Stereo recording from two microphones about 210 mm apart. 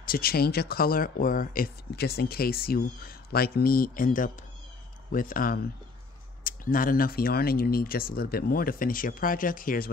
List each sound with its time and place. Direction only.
0.0 s speech: 45° left (ahead or behind)